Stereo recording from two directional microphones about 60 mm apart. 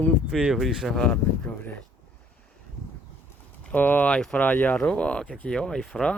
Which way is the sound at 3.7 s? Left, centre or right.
Left.